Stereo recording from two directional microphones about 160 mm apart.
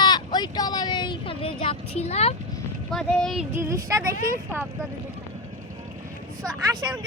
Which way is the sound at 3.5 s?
20° right (ahead or behind).